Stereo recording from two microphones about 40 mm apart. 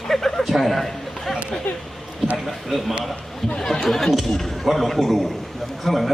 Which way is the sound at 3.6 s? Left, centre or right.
Centre.